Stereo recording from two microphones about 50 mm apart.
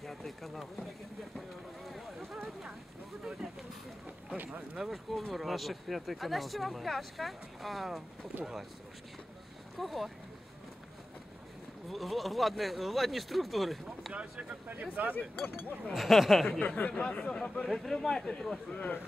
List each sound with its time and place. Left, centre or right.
0.0 s speech: centre
1.9 s a sound: centre
4.7 s speech: centre
9.8 s speech: centre
11.9 s speech: centre
14.7 s speech: right
15.1 s speech: left
15.9 s speech: centre
16.5 s speech: left
17.6 s speech: centre
18.7 s speech: left